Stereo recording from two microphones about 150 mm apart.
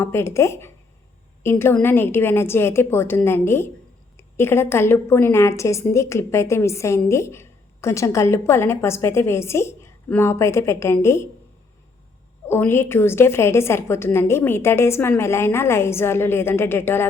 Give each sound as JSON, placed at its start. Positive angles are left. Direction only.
{"t": 0.0, "sound": "a woman's voice", "side_deg": 15}
{"t": 12.5, "sound": "a woman's voice", "side_deg": 15}